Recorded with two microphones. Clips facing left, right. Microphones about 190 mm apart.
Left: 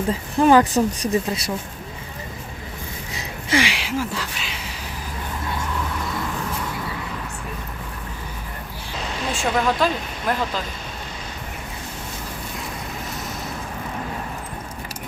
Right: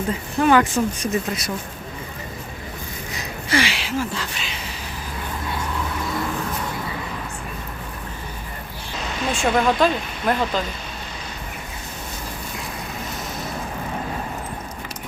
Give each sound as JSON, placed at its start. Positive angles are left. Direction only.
{"t": 0.1, "sound": "speech", "side_deg": 35}
{"t": 3.1, "sound": "a sound", "side_deg": 30}
{"t": 3.6, "sound": "speech", "side_deg": 15}
{"t": 9.3, "sound": "speech", "side_deg": 0}